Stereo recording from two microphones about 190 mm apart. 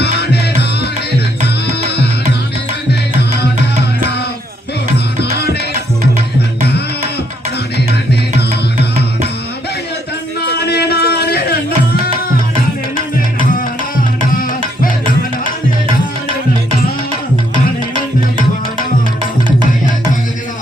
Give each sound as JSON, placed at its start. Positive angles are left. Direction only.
{"t": 0.0, "sound": "music", "side_deg": 60}
{"t": 8.4, "sound": "music", "side_deg": 60}
{"t": 10.7, "sound": "music", "side_deg": 60}